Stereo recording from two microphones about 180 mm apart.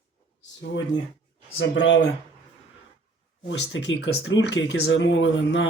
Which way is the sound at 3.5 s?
90° left.